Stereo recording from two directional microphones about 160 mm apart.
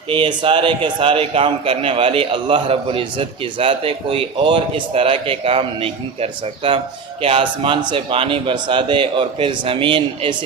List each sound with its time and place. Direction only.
0.1 s a man's voice: 30° right (ahead or behind)